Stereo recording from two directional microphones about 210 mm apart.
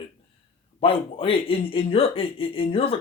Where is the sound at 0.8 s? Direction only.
25° left (ahead or behind).